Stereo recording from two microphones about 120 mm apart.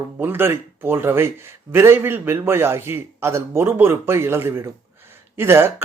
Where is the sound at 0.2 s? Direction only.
20° right (ahead or behind).